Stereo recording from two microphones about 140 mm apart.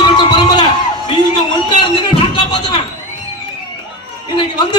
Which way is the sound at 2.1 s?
35° left (ahead or behind).